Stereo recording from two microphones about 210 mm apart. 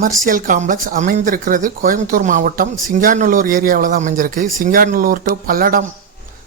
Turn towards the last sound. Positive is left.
turn(degrees=-40)  # may be behind; listen again after turning